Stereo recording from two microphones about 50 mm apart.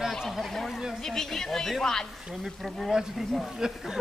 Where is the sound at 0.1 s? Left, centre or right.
Centre.